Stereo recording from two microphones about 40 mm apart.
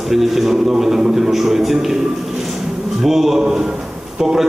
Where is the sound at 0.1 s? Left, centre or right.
Centre.